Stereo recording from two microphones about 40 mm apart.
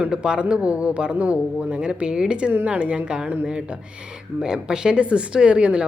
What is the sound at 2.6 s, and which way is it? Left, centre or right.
Speech, right.